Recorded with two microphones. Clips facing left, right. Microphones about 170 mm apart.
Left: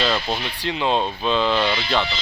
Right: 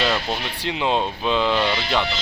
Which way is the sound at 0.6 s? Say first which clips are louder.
Even; 15° right (ahead or behind).